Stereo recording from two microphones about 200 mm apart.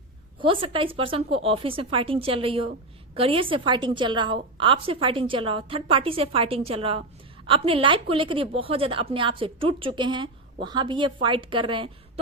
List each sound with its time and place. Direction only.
0.3 s a woman's voice: 25° right (ahead or behind)